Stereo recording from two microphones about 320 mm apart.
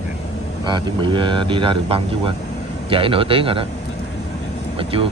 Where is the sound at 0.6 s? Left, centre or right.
Centre.